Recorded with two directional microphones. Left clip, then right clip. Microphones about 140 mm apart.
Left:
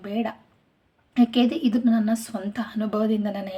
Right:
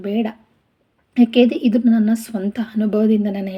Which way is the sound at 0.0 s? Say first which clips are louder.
Right 6 dB; 20° right (ahead or behind).